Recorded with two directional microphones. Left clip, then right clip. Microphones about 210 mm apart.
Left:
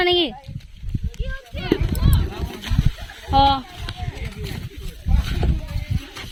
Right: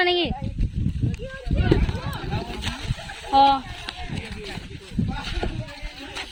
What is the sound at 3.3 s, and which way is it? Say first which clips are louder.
Speech: even; 15° left (ahead or behind).